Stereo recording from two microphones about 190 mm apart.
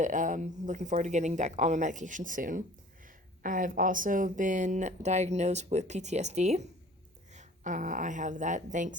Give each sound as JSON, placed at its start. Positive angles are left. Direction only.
{"t": 0.0, "sound": "speech", "side_deg": -45}